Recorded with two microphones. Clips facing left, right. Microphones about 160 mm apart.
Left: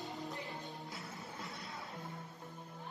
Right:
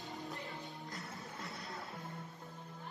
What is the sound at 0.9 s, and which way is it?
Music, centre (ahead or behind).